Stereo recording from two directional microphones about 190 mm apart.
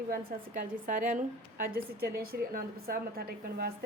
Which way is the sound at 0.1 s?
50° right (ahead or behind).